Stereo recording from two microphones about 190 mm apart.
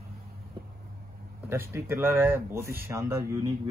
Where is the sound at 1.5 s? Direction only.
15° right (ahead or behind).